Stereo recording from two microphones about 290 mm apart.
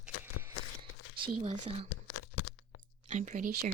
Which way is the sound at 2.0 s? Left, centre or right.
Left.